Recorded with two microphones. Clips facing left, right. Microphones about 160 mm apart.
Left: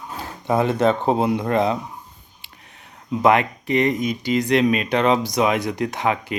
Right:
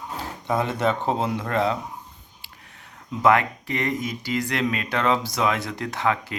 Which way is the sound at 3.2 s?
20° left (ahead or behind).